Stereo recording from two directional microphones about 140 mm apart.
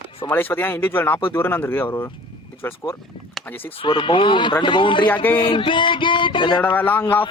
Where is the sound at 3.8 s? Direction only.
35° left (ahead or behind).